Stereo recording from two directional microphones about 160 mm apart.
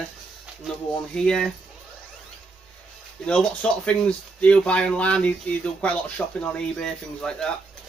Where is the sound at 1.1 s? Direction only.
5° left (ahead or behind).